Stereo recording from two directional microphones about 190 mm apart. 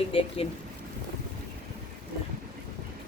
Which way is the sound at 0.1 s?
30° left (ahead or behind).